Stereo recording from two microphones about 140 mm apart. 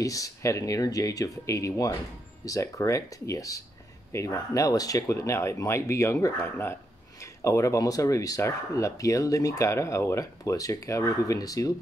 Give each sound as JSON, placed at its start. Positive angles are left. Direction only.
{"t": 0.0, "sound": "speech", "side_deg": 25}